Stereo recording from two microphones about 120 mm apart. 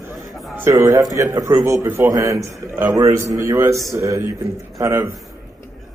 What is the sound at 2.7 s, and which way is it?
A man's voice, 15° right (ahead or behind).